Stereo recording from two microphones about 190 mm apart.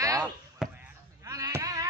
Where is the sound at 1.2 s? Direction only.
15° right (ahead or behind).